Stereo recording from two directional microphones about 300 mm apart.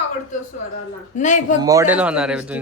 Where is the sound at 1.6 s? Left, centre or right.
Centre.